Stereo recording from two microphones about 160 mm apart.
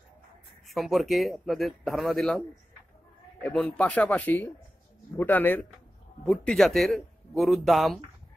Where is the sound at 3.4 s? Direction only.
5° left (ahead or behind).